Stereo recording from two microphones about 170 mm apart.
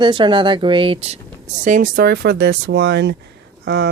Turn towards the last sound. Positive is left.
turn(degrees=-90)